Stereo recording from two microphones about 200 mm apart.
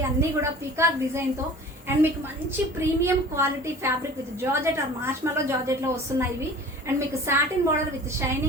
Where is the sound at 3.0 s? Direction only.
15° right (ahead or behind).